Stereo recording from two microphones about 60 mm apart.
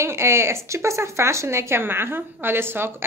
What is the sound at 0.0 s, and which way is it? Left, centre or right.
Speech, right.